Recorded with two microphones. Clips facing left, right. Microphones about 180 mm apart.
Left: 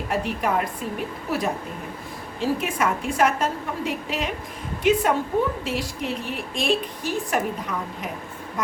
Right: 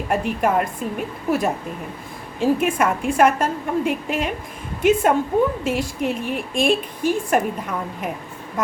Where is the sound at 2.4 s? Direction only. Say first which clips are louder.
Right 5 dB; 55° right (ahead or behind).